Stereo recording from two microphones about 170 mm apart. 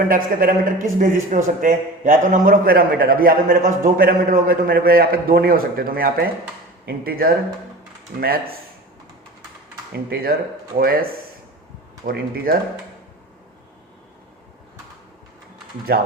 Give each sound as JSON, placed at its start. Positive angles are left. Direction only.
{"t": 0.1, "sound": "a man's voice", "side_deg": -55}
{"t": 9.9, "sound": "a man's voice", "side_deg": -60}
{"t": 12.0, "sound": "a man's voice", "side_deg": -60}
{"t": 15.9, "sound": "a man's voice", "side_deg": -65}